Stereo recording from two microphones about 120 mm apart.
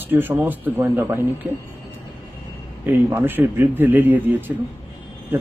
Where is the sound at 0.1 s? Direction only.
15° right (ahead or behind).